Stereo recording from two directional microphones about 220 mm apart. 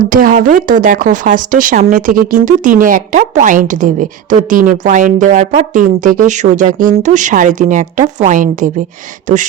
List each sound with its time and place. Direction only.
0.0 s speech: 40° right (ahead or behind)